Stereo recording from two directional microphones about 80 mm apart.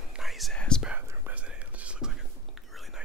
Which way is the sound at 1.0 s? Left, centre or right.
Right.